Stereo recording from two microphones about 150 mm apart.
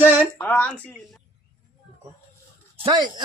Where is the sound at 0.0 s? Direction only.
10° right (ahead or behind).